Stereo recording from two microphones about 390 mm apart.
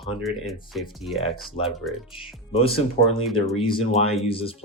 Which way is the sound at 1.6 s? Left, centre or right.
Centre.